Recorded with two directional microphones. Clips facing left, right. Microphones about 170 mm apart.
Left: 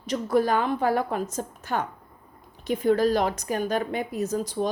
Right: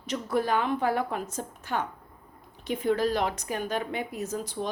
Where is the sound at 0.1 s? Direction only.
40° left (ahead or behind).